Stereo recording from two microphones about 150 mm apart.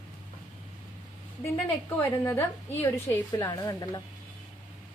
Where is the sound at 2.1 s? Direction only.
15° left (ahead or behind).